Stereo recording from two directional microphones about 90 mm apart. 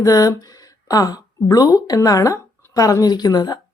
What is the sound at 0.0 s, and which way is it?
A woman's voice, 40° left (ahead or behind).